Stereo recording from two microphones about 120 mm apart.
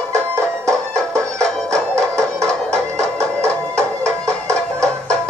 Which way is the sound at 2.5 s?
10° left (ahead or behind).